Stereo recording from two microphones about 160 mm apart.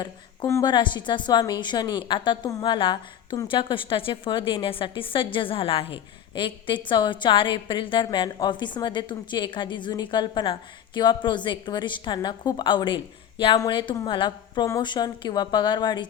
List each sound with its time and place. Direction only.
0.0 s a woman's voice: 20° left (ahead or behind)